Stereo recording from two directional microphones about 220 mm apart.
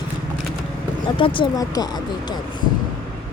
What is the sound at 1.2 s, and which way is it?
Speech, 20° left (ahead or behind).